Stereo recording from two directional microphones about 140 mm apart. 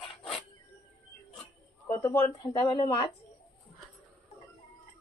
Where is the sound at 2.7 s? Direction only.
35° left (ahead or behind).